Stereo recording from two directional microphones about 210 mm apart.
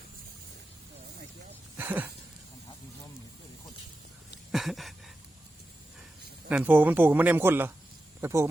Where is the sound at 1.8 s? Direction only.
10° right (ahead or behind).